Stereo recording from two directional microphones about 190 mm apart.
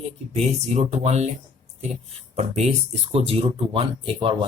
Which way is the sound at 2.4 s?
35° right (ahead or behind).